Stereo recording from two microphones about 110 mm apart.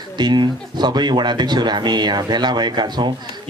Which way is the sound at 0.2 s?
40° right (ahead or behind).